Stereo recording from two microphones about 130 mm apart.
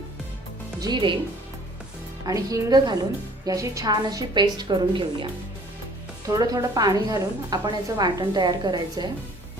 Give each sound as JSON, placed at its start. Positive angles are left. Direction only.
{"t": 0.8, "sound": "a woman's voice", "side_deg": -35}
{"t": 2.2, "sound": "a woman's voice", "side_deg": -30}